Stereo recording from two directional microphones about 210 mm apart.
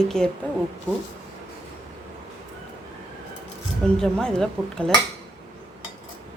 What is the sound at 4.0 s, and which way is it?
Speech, 5° left (ahead or behind).